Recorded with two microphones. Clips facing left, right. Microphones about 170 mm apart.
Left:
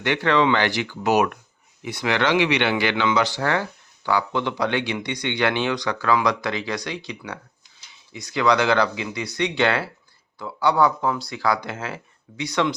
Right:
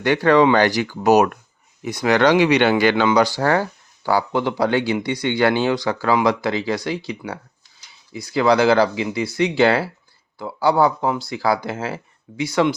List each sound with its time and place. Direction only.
0.0 s speech: 40° right (ahead or behind)